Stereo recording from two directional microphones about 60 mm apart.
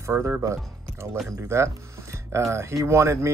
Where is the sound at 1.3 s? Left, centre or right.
Right.